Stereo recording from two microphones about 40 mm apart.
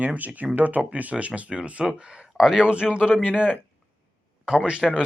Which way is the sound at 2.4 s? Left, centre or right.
Centre.